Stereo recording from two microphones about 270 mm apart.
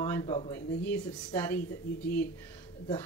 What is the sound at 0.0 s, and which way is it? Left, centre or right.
Speech, centre.